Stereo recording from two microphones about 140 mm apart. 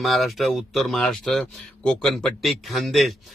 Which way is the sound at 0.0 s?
Centre (ahead or behind).